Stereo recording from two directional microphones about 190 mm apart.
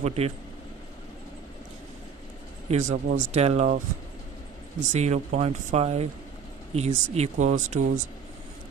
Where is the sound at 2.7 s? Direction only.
40° right (ahead or behind).